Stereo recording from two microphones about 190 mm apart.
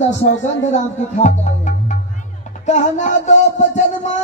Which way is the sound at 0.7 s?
40° left (ahead or behind).